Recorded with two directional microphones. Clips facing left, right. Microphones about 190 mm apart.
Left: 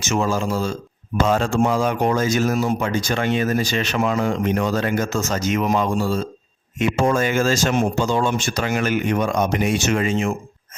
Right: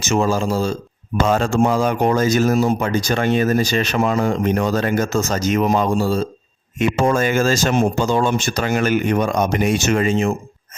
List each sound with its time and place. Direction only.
0.0 s speech: 35° right (ahead or behind)
6.7 s speech: 45° right (ahead or behind)